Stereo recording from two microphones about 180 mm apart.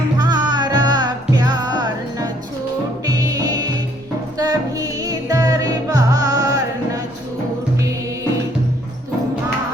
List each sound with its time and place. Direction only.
0.2 s music: 25° right (ahead or behind)